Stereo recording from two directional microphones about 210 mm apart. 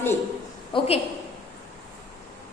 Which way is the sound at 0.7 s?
30° left (ahead or behind).